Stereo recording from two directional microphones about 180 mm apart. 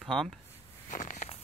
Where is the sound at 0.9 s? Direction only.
40° left (ahead or behind).